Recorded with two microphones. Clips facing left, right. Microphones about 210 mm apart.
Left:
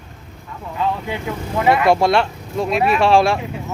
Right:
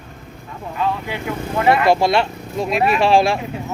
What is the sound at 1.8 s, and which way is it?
Speech, centre (ahead or behind).